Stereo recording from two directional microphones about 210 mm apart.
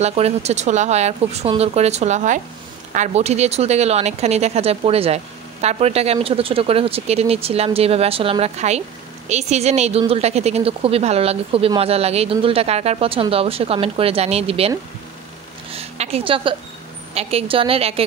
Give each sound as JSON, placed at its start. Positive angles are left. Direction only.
{"t": 0.0, "sound": "speech", "side_deg": -30}
{"t": 15.7, "sound": "a woman's voice", "side_deg": -30}